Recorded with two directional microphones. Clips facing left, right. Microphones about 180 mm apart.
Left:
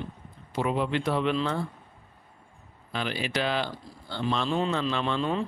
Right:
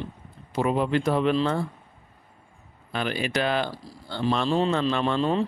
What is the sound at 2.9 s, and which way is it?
Speech, 50° right (ahead or behind).